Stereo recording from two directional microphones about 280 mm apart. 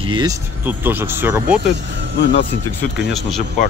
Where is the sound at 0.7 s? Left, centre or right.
Centre.